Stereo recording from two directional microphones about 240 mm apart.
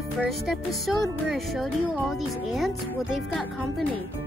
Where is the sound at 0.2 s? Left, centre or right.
Centre.